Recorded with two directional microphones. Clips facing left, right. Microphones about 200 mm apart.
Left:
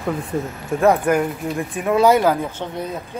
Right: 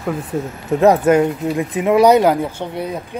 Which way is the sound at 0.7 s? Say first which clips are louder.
Right 4 dB; 20° right (ahead or behind).